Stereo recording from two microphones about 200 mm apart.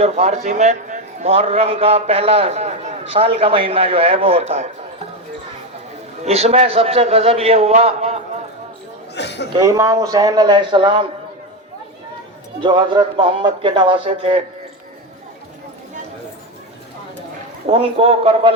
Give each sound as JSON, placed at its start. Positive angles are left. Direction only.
{"t": 0.0, "sound": "a man's voice", "side_deg": -30}
{"t": 6.2, "sound": "a man's voice", "side_deg": -30}
{"t": 9.1, "sound": "a sound", "side_deg": 60}
{"t": 9.5, "sound": "a man's voice", "side_deg": -20}
{"t": 12.6, "sound": "a man's voice", "side_deg": -20}
{"t": 17.7, "sound": "a man's voice", "side_deg": -30}